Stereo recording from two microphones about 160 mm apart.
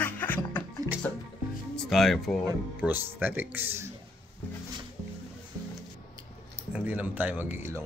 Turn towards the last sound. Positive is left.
turn(degrees=-15)  # may be behind; listen again after turning